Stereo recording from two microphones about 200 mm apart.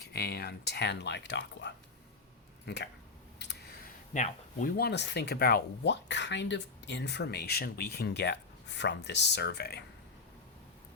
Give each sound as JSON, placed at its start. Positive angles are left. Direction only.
{"t": 0.0, "sound": "speech", "side_deg": 55}
{"t": 3.3, "sound": "a sound", "side_deg": 55}
{"t": 4.1, "sound": "speech", "side_deg": 40}